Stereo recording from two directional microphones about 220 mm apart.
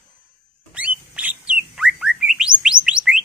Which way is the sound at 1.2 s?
5° right (ahead or behind).